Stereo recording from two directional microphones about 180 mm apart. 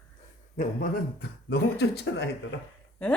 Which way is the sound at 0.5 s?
45° left (ahead or behind).